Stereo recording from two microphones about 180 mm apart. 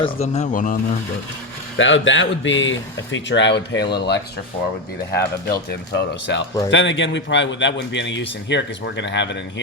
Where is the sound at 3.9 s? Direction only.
65° left (ahead or behind).